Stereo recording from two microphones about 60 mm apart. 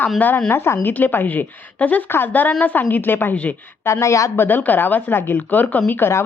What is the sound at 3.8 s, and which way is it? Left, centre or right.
Speech, left.